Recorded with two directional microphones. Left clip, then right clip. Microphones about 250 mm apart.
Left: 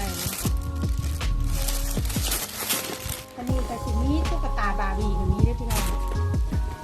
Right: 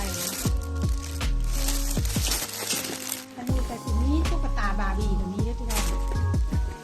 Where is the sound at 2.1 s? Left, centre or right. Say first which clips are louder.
Right 1 dB; centre.